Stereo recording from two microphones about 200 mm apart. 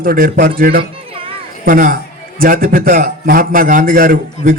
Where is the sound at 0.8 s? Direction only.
25° right (ahead or behind).